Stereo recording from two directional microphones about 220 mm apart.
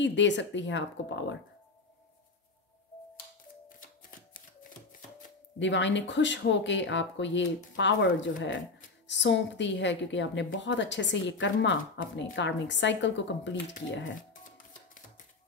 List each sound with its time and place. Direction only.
0.0 s speech: 55° left (ahead or behind)
3.6 s music: 40° left (ahead or behind)
5.6 s speech: 55° left (ahead or behind)